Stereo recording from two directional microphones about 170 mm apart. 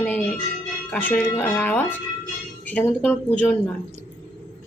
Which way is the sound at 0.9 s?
10° left (ahead or behind).